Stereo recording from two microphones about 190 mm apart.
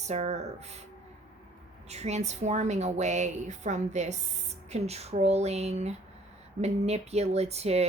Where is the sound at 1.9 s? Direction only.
35° right (ahead or behind).